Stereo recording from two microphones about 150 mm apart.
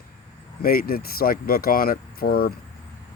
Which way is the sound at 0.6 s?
80° left.